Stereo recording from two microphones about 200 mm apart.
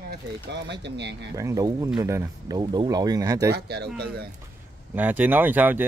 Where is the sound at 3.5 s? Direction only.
55° right (ahead or behind).